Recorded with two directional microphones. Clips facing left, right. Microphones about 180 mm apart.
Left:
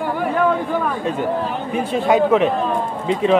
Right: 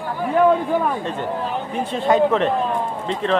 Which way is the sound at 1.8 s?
10° left (ahead or behind).